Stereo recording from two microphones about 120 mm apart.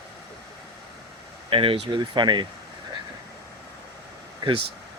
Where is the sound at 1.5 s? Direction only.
50° right (ahead or behind).